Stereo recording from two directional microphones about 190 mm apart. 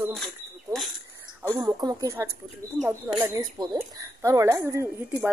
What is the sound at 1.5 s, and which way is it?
Speech, 20° right (ahead or behind).